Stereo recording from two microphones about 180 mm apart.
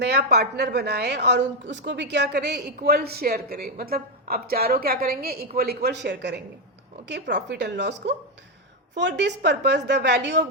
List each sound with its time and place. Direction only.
0.0 s a woman's voice: 65° right (ahead or behind)
9.0 s a woman's voice: 75° right (ahead or behind)